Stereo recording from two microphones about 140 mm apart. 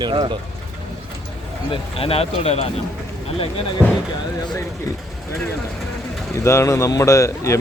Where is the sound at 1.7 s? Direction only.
40° left (ahead or behind).